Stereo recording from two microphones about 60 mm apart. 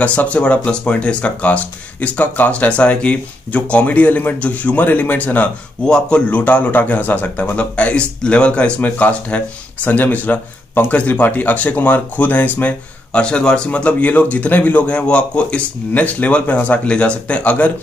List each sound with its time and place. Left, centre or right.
0.0 s speech: left
5.9 s speech: centre
6.3 s speech: left